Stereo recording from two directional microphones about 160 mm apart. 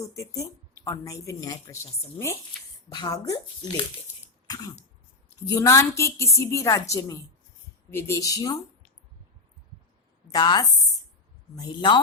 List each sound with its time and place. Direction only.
0.0 s a woman's voice: 20° left (ahead or behind)
2.9 s a woman's voice: 25° left (ahead or behind)
4.4 s throat clearing: 25° left (ahead or behind)
5.5 s a woman's voice: 20° left (ahead or behind)
10.2 s a woman's voice: 25° left (ahead or behind)